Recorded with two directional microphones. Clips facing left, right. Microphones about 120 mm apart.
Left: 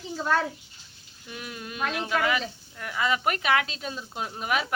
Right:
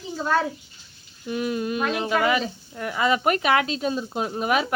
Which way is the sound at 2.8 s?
30° right (ahead or behind).